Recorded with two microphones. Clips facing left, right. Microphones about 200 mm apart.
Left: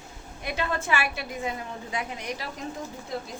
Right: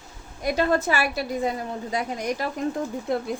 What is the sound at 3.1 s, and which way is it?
Speech, 55° right (ahead or behind).